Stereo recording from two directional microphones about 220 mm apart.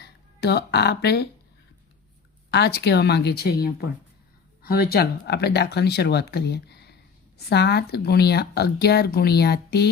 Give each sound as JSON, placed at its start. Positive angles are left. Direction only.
{"t": 0.0, "sound": "speech", "side_deg": 45}
{"t": 2.5, "sound": "speech", "side_deg": 50}